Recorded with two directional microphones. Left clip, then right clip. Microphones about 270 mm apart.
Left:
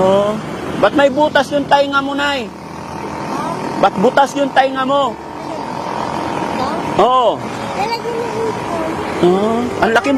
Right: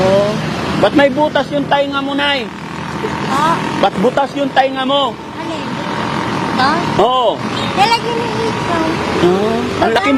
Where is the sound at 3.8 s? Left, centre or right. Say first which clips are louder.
Left 4 dB; centre.